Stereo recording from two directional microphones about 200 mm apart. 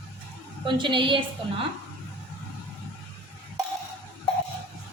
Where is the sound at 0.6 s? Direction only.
25° right (ahead or behind).